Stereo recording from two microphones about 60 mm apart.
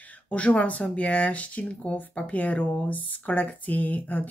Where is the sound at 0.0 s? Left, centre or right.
Left.